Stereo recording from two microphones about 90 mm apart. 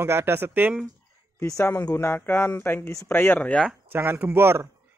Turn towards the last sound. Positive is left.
turn(degrees=-25)  # may be behind; listen again after turning